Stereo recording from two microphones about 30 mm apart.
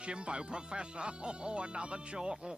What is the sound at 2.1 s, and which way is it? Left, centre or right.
Speech, right.